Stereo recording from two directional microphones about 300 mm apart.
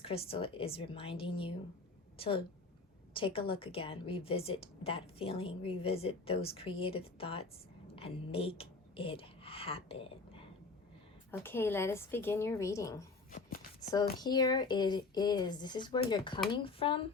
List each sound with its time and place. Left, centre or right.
0.0 s a woman's voice: centre
11.3 s speech: centre
13.3 s a sound: left
13.9 s speech: centre